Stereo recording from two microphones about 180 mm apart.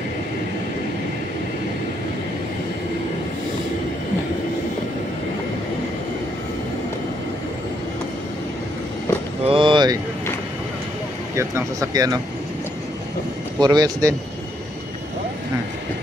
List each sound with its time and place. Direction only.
9.4 s vehicle: 30° right (ahead or behind)
11.3 s speech: 15° right (ahead or behind)
13.6 s speech: 25° right (ahead or behind)